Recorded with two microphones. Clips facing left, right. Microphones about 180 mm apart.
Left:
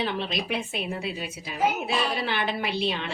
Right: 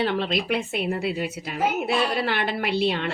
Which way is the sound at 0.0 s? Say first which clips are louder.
Right 5 dB; 65° right (ahead or behind).